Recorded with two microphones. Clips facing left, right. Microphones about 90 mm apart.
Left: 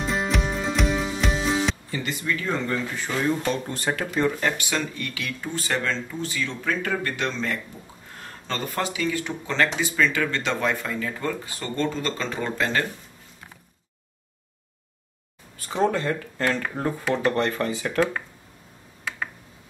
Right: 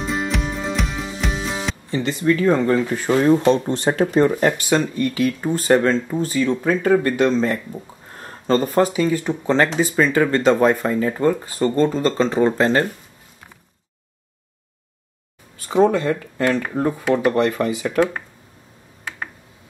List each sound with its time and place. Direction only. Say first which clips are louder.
0.0 s music: right 2 dB; centre (ahead or behind)
1.9 s speech: right 7 dB; 25° right (ahead or behind)
2.2 s speech: right 12 dB; 45° right (ahead or behind)
6.6 s speech: right 8 dB; 20° right (ahead or behind)
8.2 s speech: right 12 dB; 35° right (ahead or behind)
15.7 s speech: right 7 dB; 20° right (ahead or behind)